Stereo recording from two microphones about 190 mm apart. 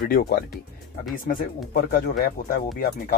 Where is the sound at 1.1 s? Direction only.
45° left (ahead or behind).